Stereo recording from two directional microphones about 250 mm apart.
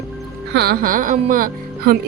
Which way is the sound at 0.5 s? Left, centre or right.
Right.